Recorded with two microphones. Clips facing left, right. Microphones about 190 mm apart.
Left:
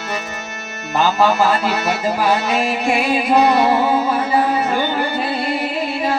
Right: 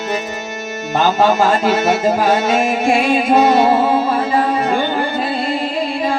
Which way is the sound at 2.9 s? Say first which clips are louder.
Right 3 dB; 5° left (ahead or behind).